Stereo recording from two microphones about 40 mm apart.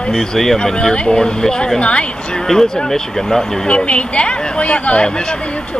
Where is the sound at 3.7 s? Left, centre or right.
Left.